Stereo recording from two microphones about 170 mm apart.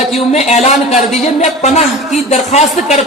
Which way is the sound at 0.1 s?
40° left (ahead or behind).